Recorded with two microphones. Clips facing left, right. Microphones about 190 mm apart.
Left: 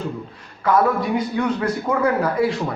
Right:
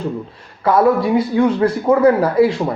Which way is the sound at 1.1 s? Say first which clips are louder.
Right 6 dB; 30° right (ahead or behind).